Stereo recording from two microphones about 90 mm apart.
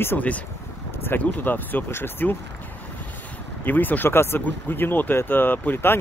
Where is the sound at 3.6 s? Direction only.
20° left (ahead or behind).